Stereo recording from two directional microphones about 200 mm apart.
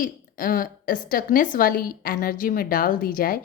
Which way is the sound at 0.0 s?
45° left (ahead or behind).